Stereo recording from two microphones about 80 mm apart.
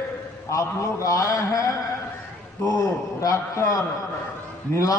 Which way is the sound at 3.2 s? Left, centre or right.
Left.